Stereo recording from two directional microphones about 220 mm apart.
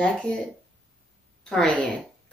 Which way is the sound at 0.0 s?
5° left (ahead or behind).